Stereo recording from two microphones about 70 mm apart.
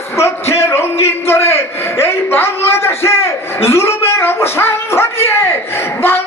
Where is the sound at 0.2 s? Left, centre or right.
Left.